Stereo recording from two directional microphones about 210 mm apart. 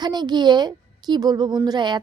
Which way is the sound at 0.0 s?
20° right (ahead or behind).